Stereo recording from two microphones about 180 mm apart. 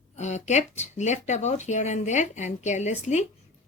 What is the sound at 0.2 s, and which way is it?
Speech, 40° left (ahead or behind).